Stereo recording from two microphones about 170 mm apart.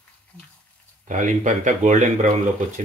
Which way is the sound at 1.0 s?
45° right (ahead or behind).